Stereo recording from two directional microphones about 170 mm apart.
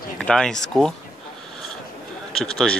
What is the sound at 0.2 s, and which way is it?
Speech, 5° left (ahead or behind).